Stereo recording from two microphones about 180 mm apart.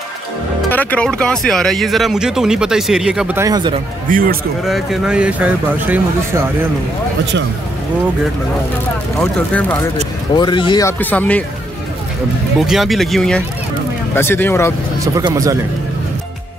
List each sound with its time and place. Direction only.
0.7 s speech: 10° left (ahead or behind); by 3.4 s 5° right (ahead or behind)
3.4 s speech: 20° right (ahead or behind)
4.1 s a man's voice: 50° right (ahead or behind)
4.6 s speech: centre (ahead or behind)
9.2 s speech: 5° left (ahead or behind)
10.3 s speech: 25° left (ahead or behind)
10.9 s speech: 10° left (ahead or behind)
12.5 s speech: centre (ahead or behind)
14.1 s speech: 10° left (ahead or behind)
15.0 s speech: 20° right (ahead or behind)